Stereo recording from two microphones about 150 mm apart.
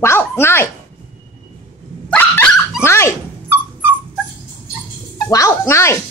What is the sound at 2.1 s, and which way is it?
Dog, 15° left (ahead or behind).